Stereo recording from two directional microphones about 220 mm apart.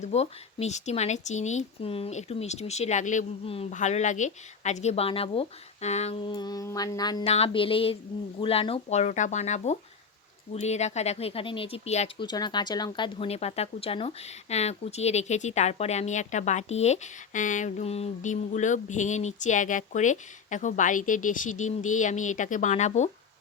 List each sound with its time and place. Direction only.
0.0 s speech: 30° left (ahead or behind)